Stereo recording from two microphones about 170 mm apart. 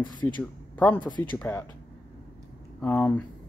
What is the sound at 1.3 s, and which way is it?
Speech, 10° left (ahead or behind).